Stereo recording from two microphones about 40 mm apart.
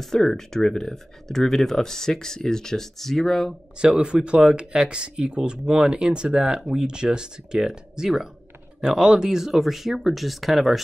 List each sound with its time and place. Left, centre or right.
0.0 s speech: centre
3.8 s speech: right; by 10.8 s centre